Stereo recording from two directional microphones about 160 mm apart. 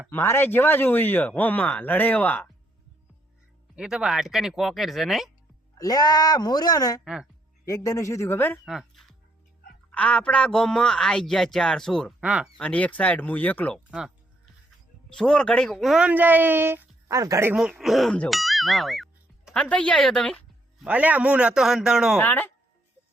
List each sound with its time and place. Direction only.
0.1 s a man's voice: 15° left (ahead or behind)
3.8 s a man's voice: 5° right (ahead or behind)
5.7 s speech: 25° left (ahead or behind)
7.0 s a man's voice: 5° right (ahead or behind)
7.6 s a man's voice: 20° left (ahead or behind)
8.6 s music: centre (ahead or behind)
9.9 s a man's voice: 10° left (ahead or behind)
12.5 s a man's voice: 10° left (ahead or behind)
15.1 s speech: 5° left (ahead or behind); by 17.5 s 20° right (ahead or behind)
17.5 s a man's voice: 5° right (ahead or behind)
20.8 s a man's voice: 10° right (ahead or behind)
22.2 s a man's voice: 10° left (ahead or behind)